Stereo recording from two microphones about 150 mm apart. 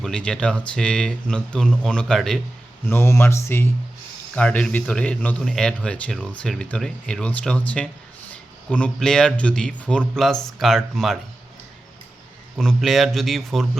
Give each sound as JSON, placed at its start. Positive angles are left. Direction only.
{"t": 0.0, "sound": "speech", "side_deg": 5}
{"t": 2.8, "sound": "speech", "side_deg": 15}
{"t": 12.5, "sound": "speech", "side_deg": 0}